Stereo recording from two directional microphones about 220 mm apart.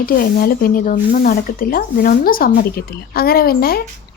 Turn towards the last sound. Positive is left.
turn(degrees=45)  # may be behind; listen again after turning